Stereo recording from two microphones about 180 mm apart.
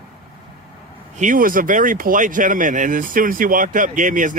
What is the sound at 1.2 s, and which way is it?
Speech, 50° right (ahead or behind).